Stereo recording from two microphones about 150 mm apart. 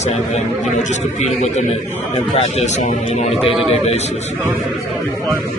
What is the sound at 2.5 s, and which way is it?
Speech, 50° left (ahead or behind).